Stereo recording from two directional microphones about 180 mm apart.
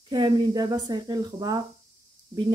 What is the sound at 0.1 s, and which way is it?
Speech, 25° right (ahead or behind).